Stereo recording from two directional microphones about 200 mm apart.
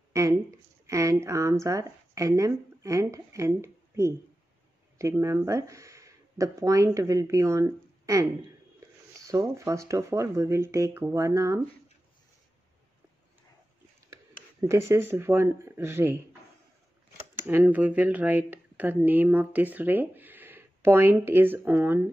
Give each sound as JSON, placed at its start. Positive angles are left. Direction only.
{"t": 0.1, "sound": "speech", "side_deg": -15}
{"t": 8.7, "sound": "a sound", "side_deg": -15}
{"t": 9.7, "sound": "speech", "side_deg": -15}
{"t": 14.1, "sound": "speech", "side_deg": -15}
{"t": 17.5, "sound": "speech", "side_deg": -10}